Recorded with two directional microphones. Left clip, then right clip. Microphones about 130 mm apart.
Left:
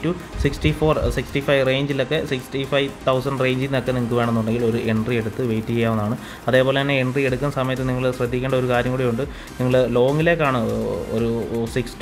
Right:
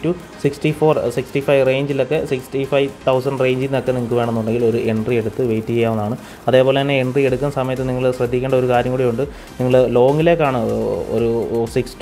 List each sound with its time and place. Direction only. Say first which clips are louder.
0.0 s speech: right 4 dB; 10° right (ahead or behind)
9.7 s speech: right 5 dB; 20° right (ahead or behind)